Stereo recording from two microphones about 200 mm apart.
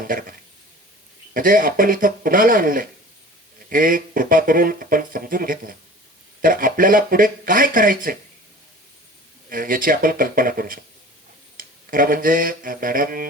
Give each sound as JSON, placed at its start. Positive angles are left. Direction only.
{"t": 0.1, "sound": "speech", "side_deg": -45}
{"t": 9.5, "sound": "speech", "side_deg": -45}
{"t": 11.5, "sound": "mantra", "side_deg": -45}